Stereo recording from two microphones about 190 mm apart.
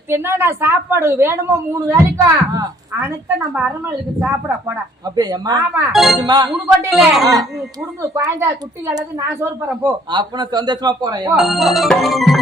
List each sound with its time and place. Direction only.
0.1 s a woman's voice: 10° right (ahead or behind)
4.2 s speech: 10° right (ahead or behind)
5.9 s music: centre (ahead or behind)
6.1 s speech: 20° right (ahead or behind)
6.5 s music: 5° right (ahead or behind)
8.1 s a woman's voice: 15° right (ahead or behind)
10.1 s speech: 25° right (ahead or behind)
11.3 s music: centre (ahead or behind)